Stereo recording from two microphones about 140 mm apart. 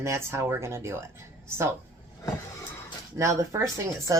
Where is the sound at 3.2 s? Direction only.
20° right (ahead or behind).